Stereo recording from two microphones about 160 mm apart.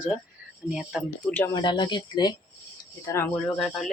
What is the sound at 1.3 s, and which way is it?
Speech, 15° left (ahead or behind).